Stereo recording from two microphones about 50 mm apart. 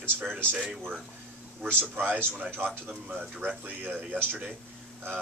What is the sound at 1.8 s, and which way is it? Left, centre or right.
Speech, right.